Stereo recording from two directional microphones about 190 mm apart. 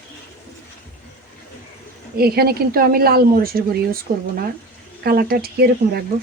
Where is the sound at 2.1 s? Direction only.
55° right (ahead or behind).